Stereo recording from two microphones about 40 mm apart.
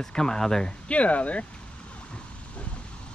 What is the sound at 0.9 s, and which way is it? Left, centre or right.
Speech, left.